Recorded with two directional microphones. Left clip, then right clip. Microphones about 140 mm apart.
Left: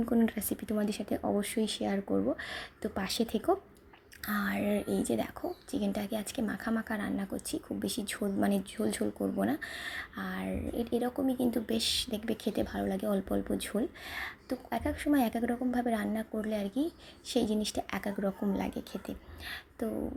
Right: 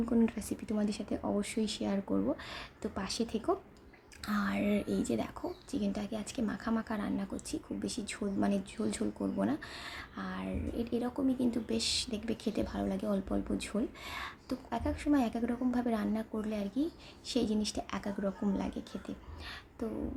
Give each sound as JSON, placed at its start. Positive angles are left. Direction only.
{"t": 0.2, "sound": "speech", "side_deg": 25}
{"t": 4.3, "sound": "speech", "side_deg": 10}